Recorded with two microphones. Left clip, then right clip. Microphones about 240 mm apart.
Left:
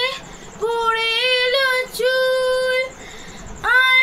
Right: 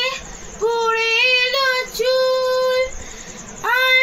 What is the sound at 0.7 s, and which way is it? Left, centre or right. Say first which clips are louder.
Female singing: right 1 dB; centre.